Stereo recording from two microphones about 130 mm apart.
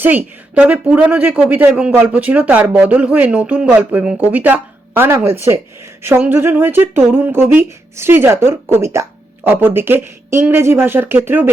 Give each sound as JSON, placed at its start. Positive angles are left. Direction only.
{"t": 0.0, "sound": "speech", "side_deg": -15}